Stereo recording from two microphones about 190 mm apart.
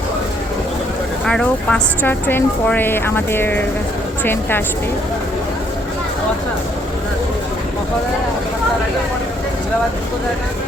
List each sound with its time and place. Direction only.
1.2 s speech: 5° left (ahead or behind)